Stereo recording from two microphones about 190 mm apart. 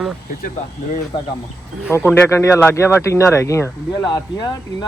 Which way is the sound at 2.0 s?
10° left (ahead or behind).